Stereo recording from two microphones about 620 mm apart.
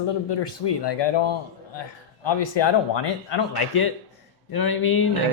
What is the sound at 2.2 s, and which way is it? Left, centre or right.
A man's voice, left.